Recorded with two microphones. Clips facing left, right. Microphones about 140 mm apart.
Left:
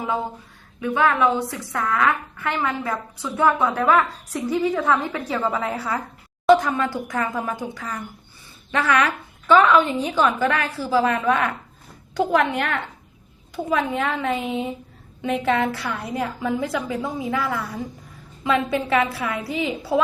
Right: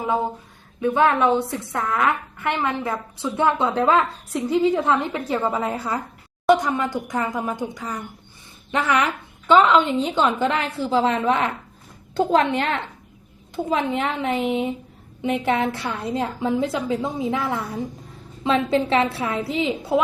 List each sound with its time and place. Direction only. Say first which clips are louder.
0.8 s a woman's voice: right 2 dB; 25° right (ahead or behind)